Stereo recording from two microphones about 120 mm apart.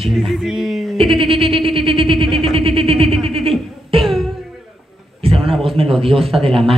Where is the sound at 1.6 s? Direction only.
50° right (ahead or behind).